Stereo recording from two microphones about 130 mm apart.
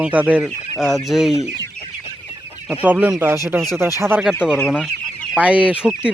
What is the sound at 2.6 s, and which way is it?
A man's voice, 10° right (ahead or behind).